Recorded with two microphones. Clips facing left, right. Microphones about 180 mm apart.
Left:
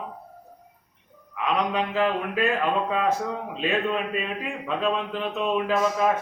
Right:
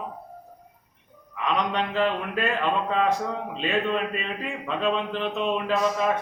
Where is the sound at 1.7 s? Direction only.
5° left (ahead or behind).